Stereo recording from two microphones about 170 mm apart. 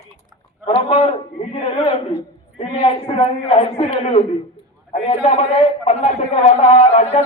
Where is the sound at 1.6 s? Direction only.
35° left (ahead or behind).